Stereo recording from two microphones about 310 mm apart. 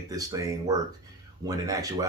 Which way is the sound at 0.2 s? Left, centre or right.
Centre.